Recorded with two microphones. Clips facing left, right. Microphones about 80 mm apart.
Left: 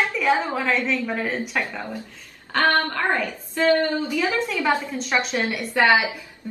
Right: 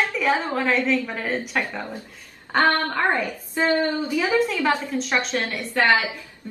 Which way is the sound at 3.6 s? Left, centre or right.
Right.